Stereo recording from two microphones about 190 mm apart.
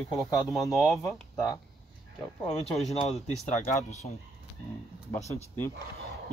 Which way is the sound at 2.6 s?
Centre (ahead or behind).